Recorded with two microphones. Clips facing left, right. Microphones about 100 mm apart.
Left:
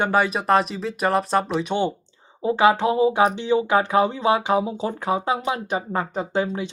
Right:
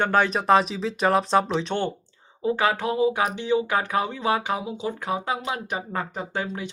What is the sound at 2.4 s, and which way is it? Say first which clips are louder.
Speech: left 5 dB; 25° left (ahead or behind).